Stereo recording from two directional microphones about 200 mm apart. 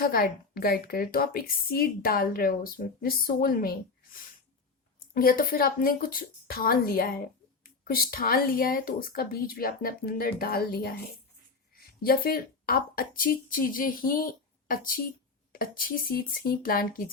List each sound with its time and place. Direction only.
0.0 s a woman's voice: 45° left (ahead or behind)
5.1 s a woman's voice: 45° left (ahead or behind)
7.6 s a sound: 50° left (ahead or behind)
8.1 s a woman's voice: 45° left (ahead or behind)
12.0 s a woman's voice: 45° left (ahead or behind)